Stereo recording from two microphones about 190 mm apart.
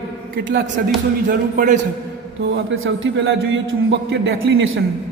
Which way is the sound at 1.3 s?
45° right (ahead or behind).